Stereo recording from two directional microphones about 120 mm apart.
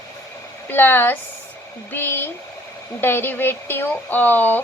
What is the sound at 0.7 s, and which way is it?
A woman's voice, 15° left (ahead or behind).